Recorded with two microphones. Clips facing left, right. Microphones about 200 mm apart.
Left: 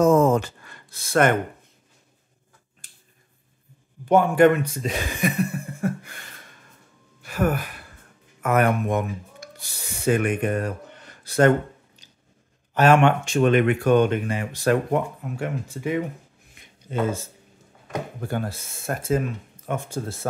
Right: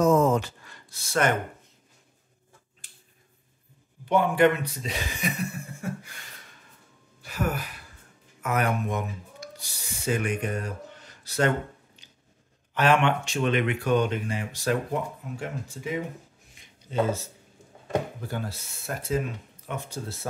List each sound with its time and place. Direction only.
0.0 s a sound: 50° left (ahead or behind)
4.1 s speech: 45° left (ahead or behind)
7.2 s sigh: 55° left (ahead or behind)
8.4 s speech: 55° left (ahead or behind)
12.7 s speech: 45° left (ahead or behind)
18.2 s speech: 55° left (ahead or behind)